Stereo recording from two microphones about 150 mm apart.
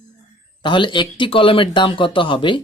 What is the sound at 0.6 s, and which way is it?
Speech, 30° left (ahead or behind).